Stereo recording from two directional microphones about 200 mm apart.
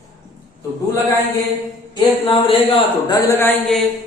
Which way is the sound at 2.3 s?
25° left (ahead or behind).